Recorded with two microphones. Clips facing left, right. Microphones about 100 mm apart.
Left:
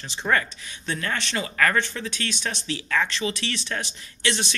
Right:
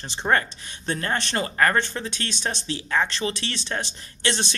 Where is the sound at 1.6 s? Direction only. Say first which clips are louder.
Right 1 dB; 30° right (ahead or behind).